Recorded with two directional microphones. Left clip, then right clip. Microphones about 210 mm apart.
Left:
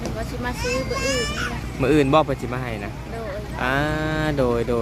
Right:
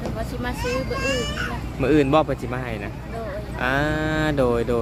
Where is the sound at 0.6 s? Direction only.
50° left (ahead or behind).